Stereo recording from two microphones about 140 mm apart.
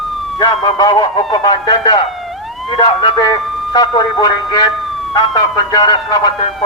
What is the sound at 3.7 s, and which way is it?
Speech, 30° left (ahead or behind).